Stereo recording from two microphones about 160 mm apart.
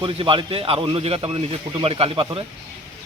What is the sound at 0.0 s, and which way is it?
Speech, 35° right (ahead or behind).